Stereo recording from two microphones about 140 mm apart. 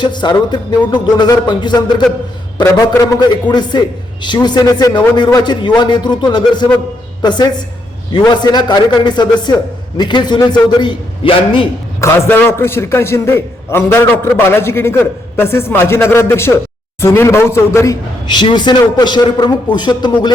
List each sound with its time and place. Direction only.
0.0 s a man's voice: 30° left (ahead or behind)
11.9 s a man's voice: 20° left (ahead or behind)
18.3 s a man's voice: 30° left (ahead or behind)